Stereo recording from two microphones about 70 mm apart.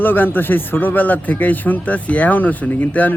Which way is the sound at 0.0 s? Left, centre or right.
Left.